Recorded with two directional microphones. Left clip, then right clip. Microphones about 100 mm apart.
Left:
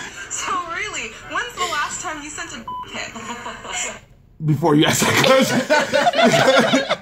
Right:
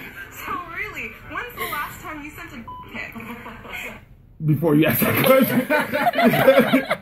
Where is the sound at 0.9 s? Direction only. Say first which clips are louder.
Left 5 dB; 5° right (ahead or behind).